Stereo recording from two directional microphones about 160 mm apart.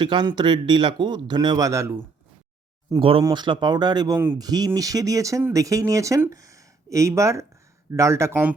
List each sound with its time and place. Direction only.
0.0 s speech: 30° right (ahead or behind)
3.0 s speech: 35° right (ahead or behind); by 8.5 s 15° right (ahead or behind)